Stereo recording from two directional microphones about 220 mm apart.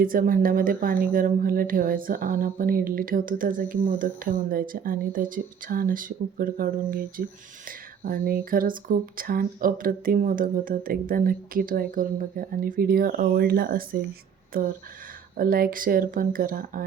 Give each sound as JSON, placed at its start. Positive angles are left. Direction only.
{"t": 0.0, "sound": "speech", "side_deg": -40}
{"t": 15.4, "sound": "speech", "side_deg": -40}